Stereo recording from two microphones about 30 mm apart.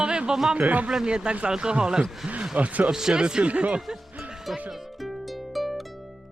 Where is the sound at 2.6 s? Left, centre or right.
Right.